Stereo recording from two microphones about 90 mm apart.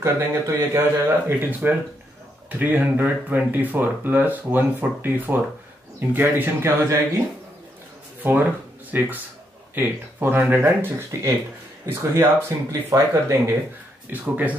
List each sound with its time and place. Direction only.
0.0 s speech: 30° right (ahead or behind)
8.2 s speech: 20° right (ahead or behind)
14.1 s speech: 20° right (ahead or behind)